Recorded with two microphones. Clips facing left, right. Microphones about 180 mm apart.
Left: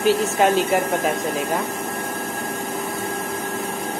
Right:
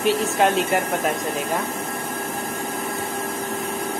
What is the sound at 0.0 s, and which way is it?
Speech, centre (ahead or behind).